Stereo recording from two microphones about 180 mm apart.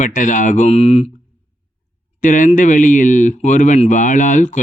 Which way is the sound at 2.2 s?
45° left (ahead or behind).